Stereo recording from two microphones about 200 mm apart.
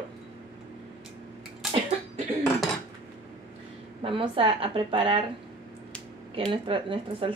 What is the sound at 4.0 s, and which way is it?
Speech, 25° right (ahead or behind).